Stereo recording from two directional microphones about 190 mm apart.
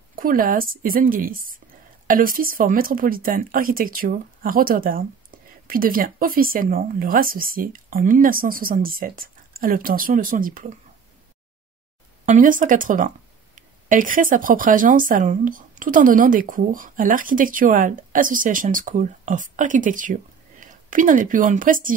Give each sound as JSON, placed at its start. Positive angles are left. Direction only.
{"t": 0.1, "sound": "speech", "side_deg": -50}
{"t": 12.3, "sound": "speech", "side_deg": -45}